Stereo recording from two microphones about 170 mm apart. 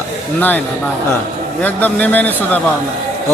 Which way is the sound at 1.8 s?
10° left (ahead or behind).